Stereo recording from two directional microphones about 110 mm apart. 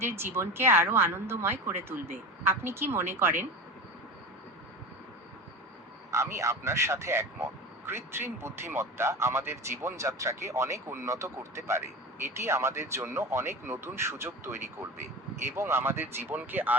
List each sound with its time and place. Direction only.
0.0 s speech: 20° right (ahead or behind)
6.1 s speech: 25° right (ahead or behind)